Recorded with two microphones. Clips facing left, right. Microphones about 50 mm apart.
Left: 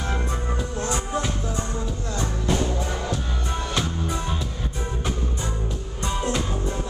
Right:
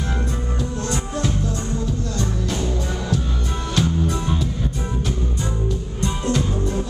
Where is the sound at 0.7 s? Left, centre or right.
Centre.